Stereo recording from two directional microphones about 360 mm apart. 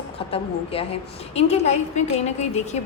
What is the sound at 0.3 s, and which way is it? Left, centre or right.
A woman's voice, centre.